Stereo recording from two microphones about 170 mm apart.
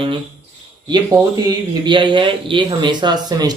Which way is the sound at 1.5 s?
25° right (ahead or behind).